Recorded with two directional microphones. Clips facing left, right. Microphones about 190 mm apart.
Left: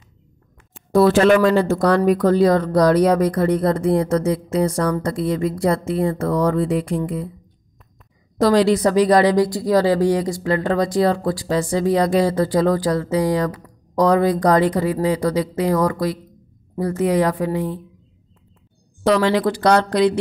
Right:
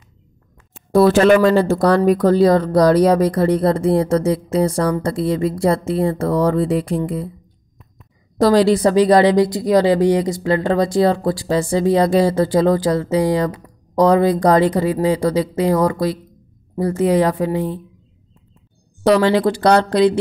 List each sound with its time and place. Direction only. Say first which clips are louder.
0.9 s speech: right 2 dB; 40° right (ahead or behind)
8.4 s speech: right 2 dB; 35° right (ahead or behind)
19.0 s speech: right 3 dB; 35° right (ahead or behind)